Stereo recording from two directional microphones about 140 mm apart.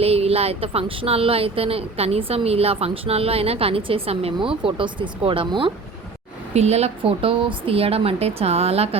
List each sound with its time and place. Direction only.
0.0 s speech: 45° right (ahead or behind)
6.5 s speech: 50° right (ahead or behind)